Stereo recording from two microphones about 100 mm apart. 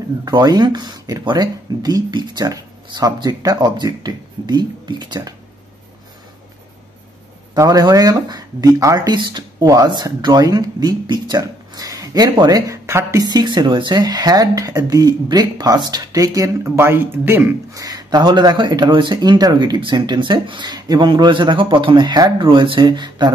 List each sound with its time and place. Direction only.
0.2 s speech: 45° right (ahead or behind)
7.5 s speech: 35° right (ahead or behind)
13.3 s speech: 45° right (ahead or behind); by 17.6 s 20° right (ahead or behind)
17.7 s speech: 40° right (ahead or behind)
22.4 s speech: 55° right (ahead or behind)